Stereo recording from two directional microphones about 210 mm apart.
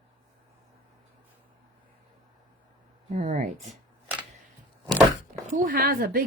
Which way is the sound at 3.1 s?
35° right (ahead or behind).